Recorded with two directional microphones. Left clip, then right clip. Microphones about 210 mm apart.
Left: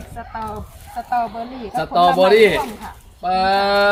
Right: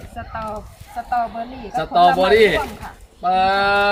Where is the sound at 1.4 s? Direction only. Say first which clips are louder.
Even; 10° left (ahead or behind).